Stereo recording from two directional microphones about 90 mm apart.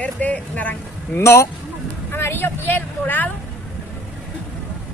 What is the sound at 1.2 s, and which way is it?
Speech, 30° left (ahead or behind).